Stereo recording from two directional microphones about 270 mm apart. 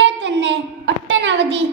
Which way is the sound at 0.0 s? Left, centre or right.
Right.